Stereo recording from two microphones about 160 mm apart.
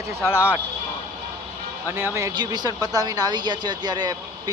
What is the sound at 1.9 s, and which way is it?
Speech, 15° right (ahead or behind).